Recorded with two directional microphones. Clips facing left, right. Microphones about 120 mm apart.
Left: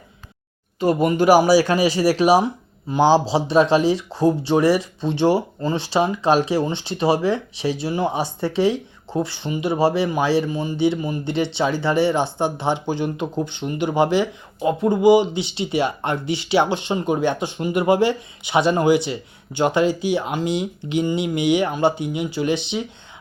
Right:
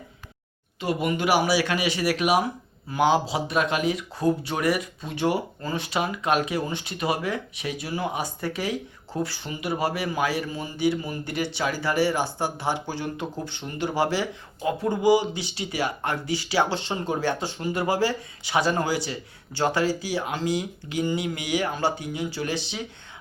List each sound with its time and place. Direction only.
0.8 s speech: 40° left (ahead or behind); by 22.8 s 20° left (ahead or behind)